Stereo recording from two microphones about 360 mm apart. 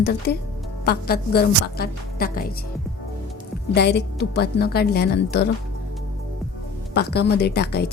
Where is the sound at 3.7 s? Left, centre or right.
Left.